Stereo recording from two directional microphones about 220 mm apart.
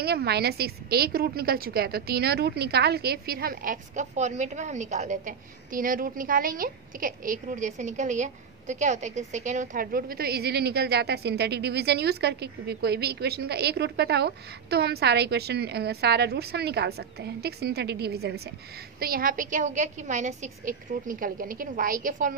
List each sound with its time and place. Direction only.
0.0 s a woman's voice: 45° right (ahead or behind)